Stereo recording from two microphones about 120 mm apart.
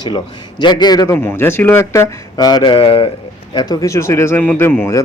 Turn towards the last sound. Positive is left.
turn(degrees=20)  # may be behind; listen again after turning